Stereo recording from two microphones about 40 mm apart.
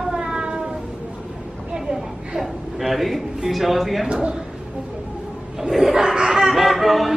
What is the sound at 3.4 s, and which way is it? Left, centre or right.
Speech, centre.